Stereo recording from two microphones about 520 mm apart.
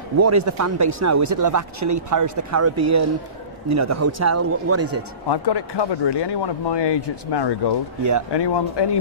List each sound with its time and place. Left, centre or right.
0.2 s a man's voice: right
5.3 s speech: left